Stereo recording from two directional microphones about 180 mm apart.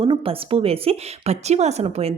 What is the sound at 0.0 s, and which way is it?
A woman's voice, 30° right (ahead or behind).